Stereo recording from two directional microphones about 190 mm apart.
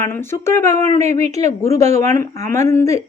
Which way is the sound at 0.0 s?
15° left (ahead or behind).